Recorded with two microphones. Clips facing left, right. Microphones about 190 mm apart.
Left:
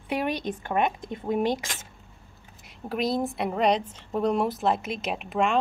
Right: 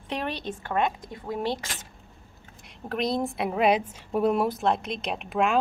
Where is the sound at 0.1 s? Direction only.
10° left (ahead or behind).